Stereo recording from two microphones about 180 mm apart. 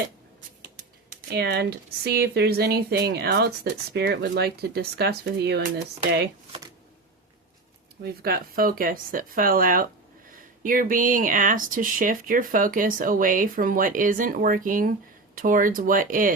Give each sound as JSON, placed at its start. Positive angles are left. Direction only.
{"t": 1.3, "sound": "speech", "side_deg": -65}
{"t": 8.0, "sound": "speech", "side_deg": -60}